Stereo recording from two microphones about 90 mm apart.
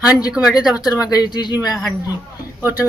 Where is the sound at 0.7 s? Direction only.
40° left (ahead or behind).